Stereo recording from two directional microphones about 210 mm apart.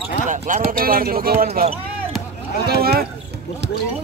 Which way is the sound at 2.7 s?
45° right (ahead or behind).